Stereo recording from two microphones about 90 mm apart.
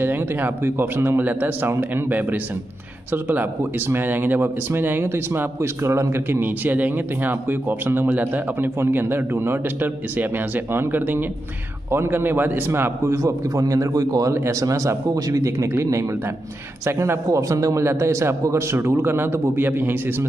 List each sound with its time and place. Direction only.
0.0 s a man's voice: 20° right (ahead or behind)